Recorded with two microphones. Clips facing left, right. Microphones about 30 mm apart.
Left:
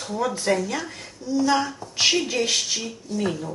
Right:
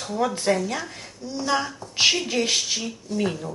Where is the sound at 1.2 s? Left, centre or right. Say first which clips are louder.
Left 8 dB; right.